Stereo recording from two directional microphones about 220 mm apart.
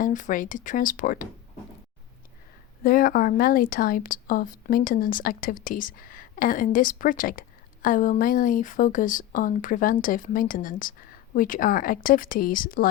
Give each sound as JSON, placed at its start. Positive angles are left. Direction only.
{"t": 0.0, "sound": "speech", "side_deg": 35}
{"t": 2.8, "sound": "speech", "side_deg": 40}